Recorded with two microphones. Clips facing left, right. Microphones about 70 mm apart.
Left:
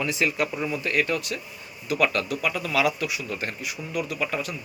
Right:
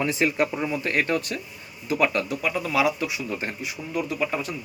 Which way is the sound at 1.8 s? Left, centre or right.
Right.